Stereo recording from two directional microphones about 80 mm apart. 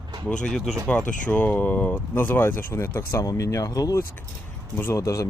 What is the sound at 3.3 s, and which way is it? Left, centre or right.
Speech, left.